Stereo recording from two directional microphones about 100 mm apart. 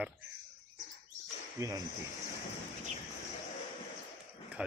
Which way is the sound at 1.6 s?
30° right (ahead or behind).